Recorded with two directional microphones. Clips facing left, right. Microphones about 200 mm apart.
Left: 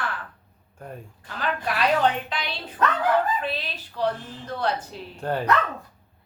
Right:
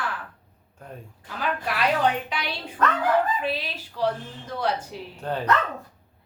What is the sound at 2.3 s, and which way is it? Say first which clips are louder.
A woman's voice: right 1 dB; 10° right (ahead or behind).